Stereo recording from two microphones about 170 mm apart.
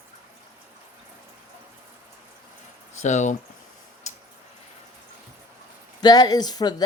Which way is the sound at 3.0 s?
45° left (ahead or behind).